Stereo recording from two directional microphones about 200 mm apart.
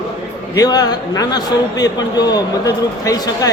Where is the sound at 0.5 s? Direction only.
20° left (ahead or behind).